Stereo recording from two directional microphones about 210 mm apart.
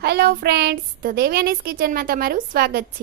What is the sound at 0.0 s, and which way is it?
A woman's voice, 50° right (ahead or behind).